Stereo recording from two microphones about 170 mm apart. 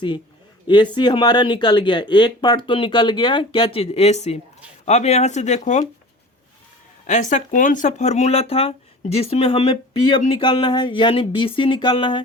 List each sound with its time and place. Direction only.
0.7 s speech: 25° left (ahead or behind); by 5.8 s 45° left (ahead or behind)
7.1 s speech: 45° left (ahead or behind); by 12.2 s 30° left (ahead or behind)